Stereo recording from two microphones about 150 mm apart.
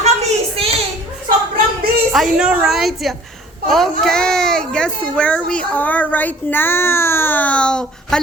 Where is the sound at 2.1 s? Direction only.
5° right (ahead or behind).